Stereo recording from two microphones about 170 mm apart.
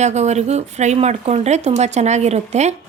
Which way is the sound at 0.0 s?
40° right (ahead or behind).